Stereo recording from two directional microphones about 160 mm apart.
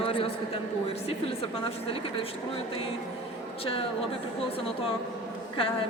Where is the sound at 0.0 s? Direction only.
35° left (ahead or behind).